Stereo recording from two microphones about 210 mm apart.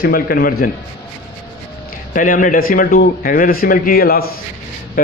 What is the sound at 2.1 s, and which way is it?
A man's voice, 40° left (ahead or behind).